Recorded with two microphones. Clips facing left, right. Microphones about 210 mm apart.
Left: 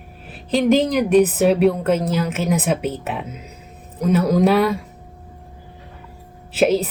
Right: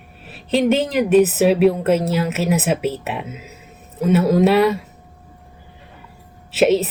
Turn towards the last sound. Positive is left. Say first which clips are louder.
# right 2 dB
turn(degrees=-5)  # may be behind; listen again after turning